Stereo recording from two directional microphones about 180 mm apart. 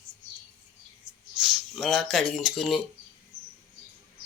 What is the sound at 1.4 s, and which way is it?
Speech, centre (ahead or behind).